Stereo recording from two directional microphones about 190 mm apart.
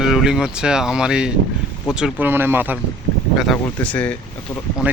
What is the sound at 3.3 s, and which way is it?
Speech, centre (ahead or behind).